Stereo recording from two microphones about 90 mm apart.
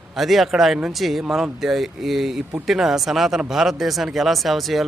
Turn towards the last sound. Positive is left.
turn(degrees=0)  # may be behind; listen again after turning